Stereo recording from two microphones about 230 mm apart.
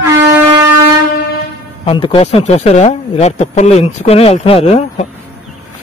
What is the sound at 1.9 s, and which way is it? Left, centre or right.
Speech, left.